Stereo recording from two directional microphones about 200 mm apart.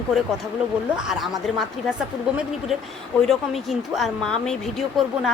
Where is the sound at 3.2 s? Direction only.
Centre (ahead or behind).